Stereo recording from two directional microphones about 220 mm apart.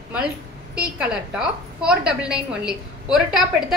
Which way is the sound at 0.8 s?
5° right (ahead or behind).